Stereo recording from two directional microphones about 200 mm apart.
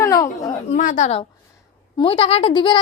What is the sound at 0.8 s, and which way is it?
A woman's voice, 40° left (ahead or behind).